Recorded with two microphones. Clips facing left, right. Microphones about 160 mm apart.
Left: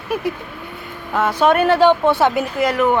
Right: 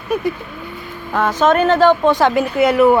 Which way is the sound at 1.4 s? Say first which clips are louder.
Right 1 dB; 10° left (ahead or behind).